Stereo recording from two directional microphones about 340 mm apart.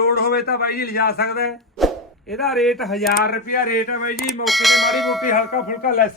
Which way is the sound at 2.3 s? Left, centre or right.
Centre.